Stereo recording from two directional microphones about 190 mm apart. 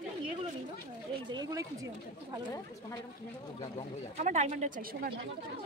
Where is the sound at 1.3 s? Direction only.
20° right (ahead or behind).